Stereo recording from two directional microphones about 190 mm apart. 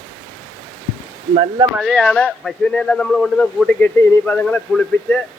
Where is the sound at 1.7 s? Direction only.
Centre (ahead or behind).